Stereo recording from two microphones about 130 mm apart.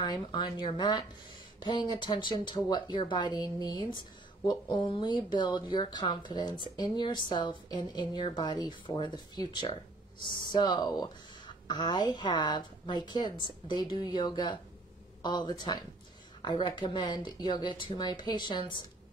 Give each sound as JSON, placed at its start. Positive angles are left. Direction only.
{"t": 0.0, "sound": "speech", "side_deg": 35}